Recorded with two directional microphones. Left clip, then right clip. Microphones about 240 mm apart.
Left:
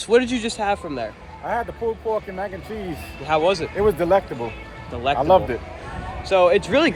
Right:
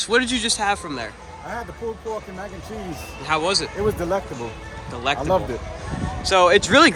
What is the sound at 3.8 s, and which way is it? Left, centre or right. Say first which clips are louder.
Speech: left 5 dB; centre.